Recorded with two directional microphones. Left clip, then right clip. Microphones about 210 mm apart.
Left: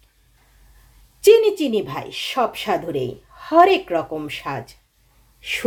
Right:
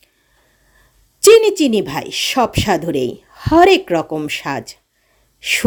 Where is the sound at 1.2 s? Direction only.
55° right (ahead or behind).